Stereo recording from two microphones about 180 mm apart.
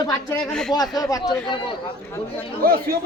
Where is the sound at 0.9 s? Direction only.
20° left (ahead or behind).